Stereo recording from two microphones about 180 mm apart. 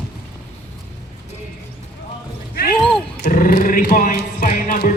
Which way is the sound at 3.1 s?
55° left (ahead or behind).